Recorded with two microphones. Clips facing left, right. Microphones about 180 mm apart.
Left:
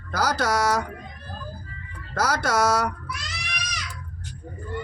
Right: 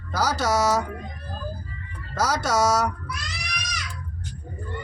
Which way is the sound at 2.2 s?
55° left (ahead or behind).